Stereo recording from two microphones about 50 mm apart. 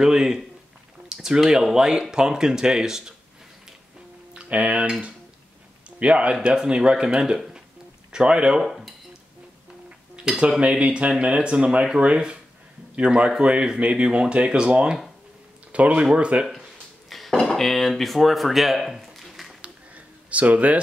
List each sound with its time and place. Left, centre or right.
0.0 s speech: centre
4.3 s a man's voice: right
8.6 s speech: centre
10.3 s speech: centre
10.6 s speech: right
17.1 s dishes: centre
17.4 s speech: centre
19.6 s a sound: right